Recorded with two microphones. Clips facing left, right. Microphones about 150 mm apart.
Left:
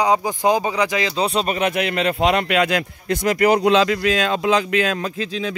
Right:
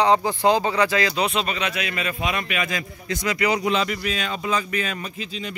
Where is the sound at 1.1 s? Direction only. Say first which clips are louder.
Left 3 dB; 35° left (ahead or behind); by 5.2 s 90° left.